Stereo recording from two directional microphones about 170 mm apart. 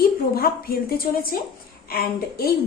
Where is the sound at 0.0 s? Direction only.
60° left (ahead or behind).